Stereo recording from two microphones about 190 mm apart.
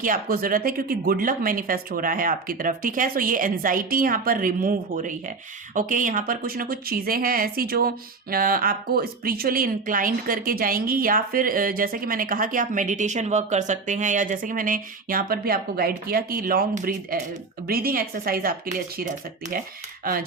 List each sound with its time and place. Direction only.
0.0 s a woman's voice: 45° right (ahead or behind)